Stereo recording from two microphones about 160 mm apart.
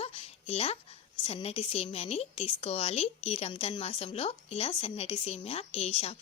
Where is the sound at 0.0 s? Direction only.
40° left (ahead or behind).